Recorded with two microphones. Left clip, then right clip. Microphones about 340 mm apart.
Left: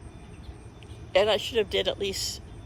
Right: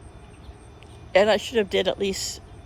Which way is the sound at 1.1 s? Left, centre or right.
Centre.